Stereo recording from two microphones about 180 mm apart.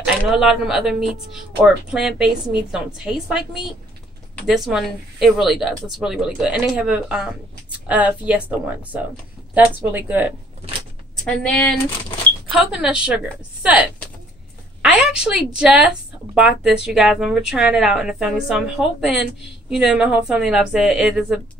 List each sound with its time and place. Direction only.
0.2 s a woman's voice: centre (ahead or behind)
11.2 s a woman's voice: 5° left (ahead or behind)